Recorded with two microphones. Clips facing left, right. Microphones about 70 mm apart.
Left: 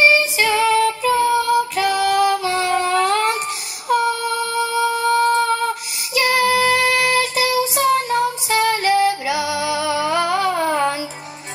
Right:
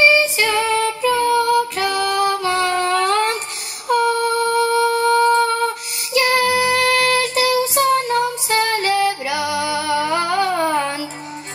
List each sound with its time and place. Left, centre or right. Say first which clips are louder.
0.2 s female singing: left 1 dB; right
1.3 s child singing: right 1 dB; right
2.0 s music: left 2 dB; right
4.5 s music: right 2 dB; right
6.1 s child singing: even; right